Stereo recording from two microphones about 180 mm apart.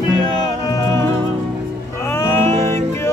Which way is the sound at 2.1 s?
15° left (ahead or behind).